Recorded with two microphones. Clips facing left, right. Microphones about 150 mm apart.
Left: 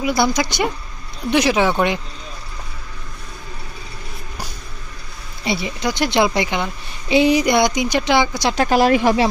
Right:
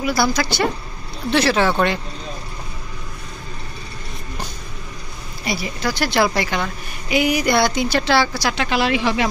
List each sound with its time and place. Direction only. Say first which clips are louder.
0.0 s a woman's voice: left 1 dB; 20° left (ahead or behind)
5.4 s a woman's voice: left 2 dB; 25° left (ahead or behind)
8.5 s speech: left 6 dB; 40° left (ahead or behind)